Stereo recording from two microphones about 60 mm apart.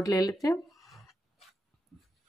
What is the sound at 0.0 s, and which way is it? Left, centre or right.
Speech, left.